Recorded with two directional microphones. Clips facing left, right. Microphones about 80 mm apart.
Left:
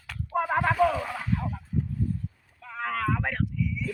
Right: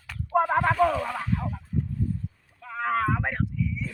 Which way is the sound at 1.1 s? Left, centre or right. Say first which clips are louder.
Right 1 dB; centre.